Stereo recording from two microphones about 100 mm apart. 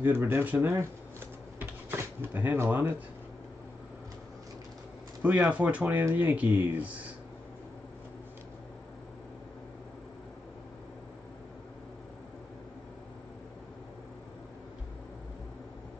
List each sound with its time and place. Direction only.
0.0 s speech: 25° right (ahead or behind)
1.6 s a sound: 20° right (ahead or behind)
5.2 s speech: 15° right (ahead or behind)